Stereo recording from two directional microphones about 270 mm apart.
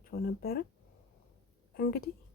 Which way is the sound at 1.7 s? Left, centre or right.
Left.